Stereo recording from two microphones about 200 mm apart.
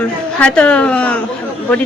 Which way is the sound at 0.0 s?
5° left (ahead or behind).